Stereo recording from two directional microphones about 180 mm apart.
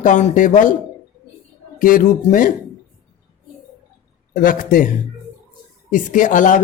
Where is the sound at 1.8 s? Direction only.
50° left (ahead or behind).